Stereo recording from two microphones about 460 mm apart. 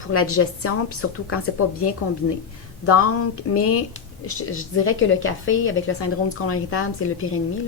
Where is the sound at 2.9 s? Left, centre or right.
Left.